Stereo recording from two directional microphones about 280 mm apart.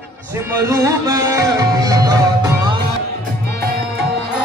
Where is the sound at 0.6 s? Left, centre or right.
Centre.